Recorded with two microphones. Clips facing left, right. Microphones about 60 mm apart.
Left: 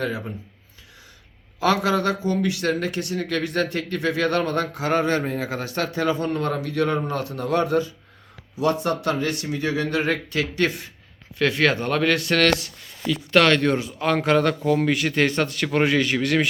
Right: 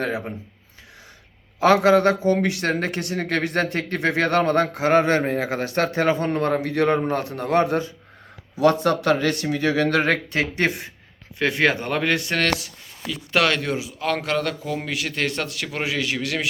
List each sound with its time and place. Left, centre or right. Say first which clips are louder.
0.0 s speech: right 1 dB; right
1.5 s speech: right 5 dB; right
8.6 s speech: right 4 dB; right
10.3 s speech: right 1 dB; right
13.1 s speech: left 3 dB; centre